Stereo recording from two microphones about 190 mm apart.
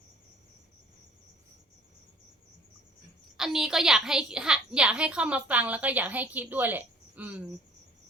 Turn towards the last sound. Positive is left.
turn(degrees=-10)  # may be behind; listen again after turning